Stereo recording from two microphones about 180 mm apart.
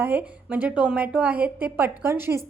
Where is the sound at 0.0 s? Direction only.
10° right (ahead or behind).